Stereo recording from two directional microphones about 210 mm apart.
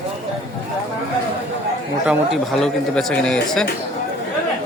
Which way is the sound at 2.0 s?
Centre (ahead or behind).